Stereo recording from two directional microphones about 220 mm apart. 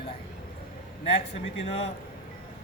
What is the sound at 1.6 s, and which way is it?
Speech, 30° left (ahead or behind).